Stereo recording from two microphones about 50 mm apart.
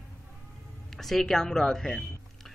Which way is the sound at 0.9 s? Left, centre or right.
Centre.